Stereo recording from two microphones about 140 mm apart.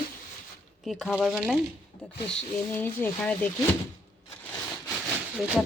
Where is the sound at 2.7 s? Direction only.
15° left (ahead or behind).